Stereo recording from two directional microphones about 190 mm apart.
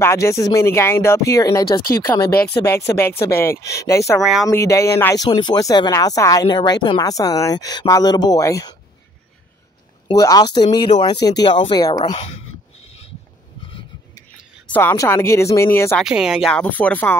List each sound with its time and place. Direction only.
0.0 s speech: 15° left (ahead or behind)
4.2 s speech: centre (ahead or behind)
4.5 s speech: 15° left (ahead or behind)
10.0 s speech: 20° left (ahead or behind)
14.7 s speech: 10° left (ahead or behind)
16.0 s speech: 5° right (ahead or behind)